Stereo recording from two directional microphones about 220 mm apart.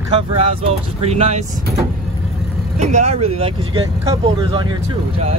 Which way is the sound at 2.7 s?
30° right (ahead or behind).